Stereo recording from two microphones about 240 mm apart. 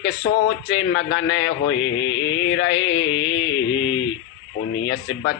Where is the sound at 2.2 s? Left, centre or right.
Left.